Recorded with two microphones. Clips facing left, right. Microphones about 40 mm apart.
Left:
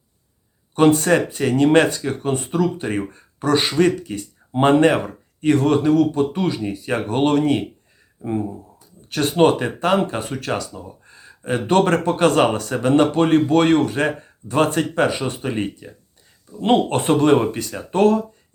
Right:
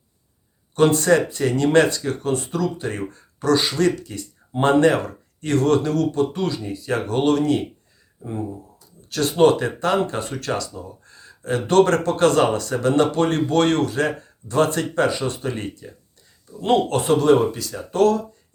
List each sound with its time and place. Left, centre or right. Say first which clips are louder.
0.8 s speech: left 1 dB; centre
8.8 s speech: left 1 dB; left
16.6 s speech: left 1 dB; left